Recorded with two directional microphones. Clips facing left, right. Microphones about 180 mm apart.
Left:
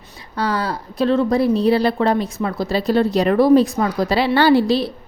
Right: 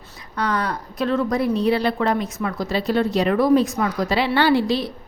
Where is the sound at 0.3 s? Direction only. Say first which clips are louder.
Left 2 dB; 30° left (ahead or behind).